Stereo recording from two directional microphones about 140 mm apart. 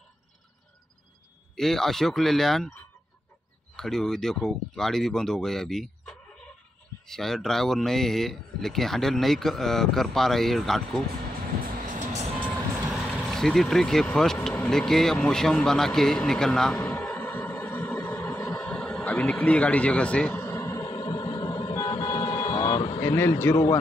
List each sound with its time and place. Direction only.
1.5 s speech: 5° left (ahead or behind)
11.7 s vehicle: 70° right (ahead or behind)
12.9 s speech: centre (ahead or behind)
14.5 s a sound: 10° left (ahead or behind); by 22.5 s 25° left (ahead or behind)
22.5 s vehicle: 30° left (ahead or behind)